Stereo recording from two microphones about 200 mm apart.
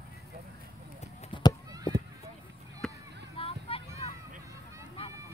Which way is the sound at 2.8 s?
5° left (ahead or behind).